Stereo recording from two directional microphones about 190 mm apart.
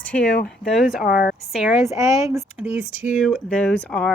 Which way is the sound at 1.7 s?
15° right (ahead or behind).